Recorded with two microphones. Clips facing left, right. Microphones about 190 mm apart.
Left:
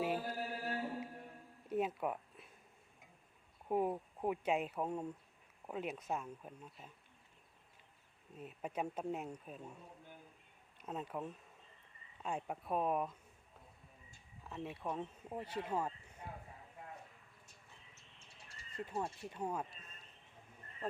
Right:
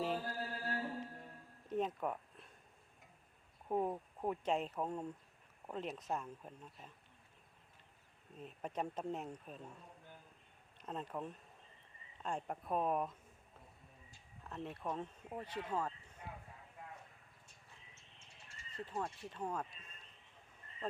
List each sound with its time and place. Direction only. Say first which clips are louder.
0.0 s music: left 1 dB; 10° left (ahead or behind)
1.7 s a sound: left 1 dB; 10° left (ahead or behind)
3.7 s speech: left 2 dB; 5° left (ahead or behind)
8.4 s speech: left 1 dB; 5° left (ahead or behind)
10.8 s speech: left 1 dB; 5° left (ahead or behind)
14.4 s speech: even; 5° left (ahead or behind)
17.9 s bird: left 1 dB; 35° left (ahead or behind)
18.9 s speech: left 1 dB; 10° left (ahead or behind)